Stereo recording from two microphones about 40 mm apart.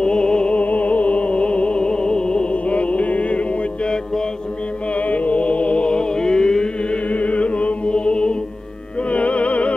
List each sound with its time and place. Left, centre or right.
0.0 s music: left
0.7 s music: left; by 2.4 s centre
2.5 s music: left
7.1 s music: left
9.1 s music: left